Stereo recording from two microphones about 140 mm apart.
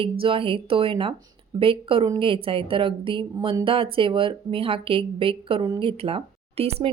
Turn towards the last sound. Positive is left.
turn(degrees=-45)  # may be behind; listen again after turning